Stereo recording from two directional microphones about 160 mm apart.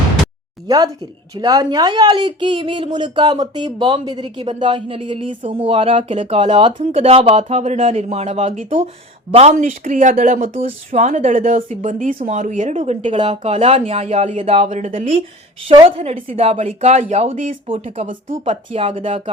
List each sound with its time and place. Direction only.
1.4 s a woman's voice: 25° right (ahead or behind); by 15.1 s 55° right (ahead or behind)
15.7 s speech: 35° right (ahead or behind); by 17.6 s 50° right (ahead or behind)
17.7 s speech: 40° right (ahead or behind)
18.1 s speech: 55° right (ahead or behind)
18.7 s speech: 35° right (ahead or behind)